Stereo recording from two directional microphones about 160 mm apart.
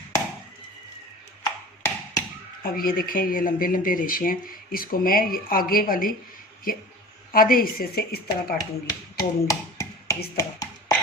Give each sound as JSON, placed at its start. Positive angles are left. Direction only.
{"t": 2.6, "sound": "speech", "side_deg": 65}
{"t": 8.5, "sound": "speech", "side_deg": 25}
{"t": 10.3, "sound": "a sound", "side_deg": 20}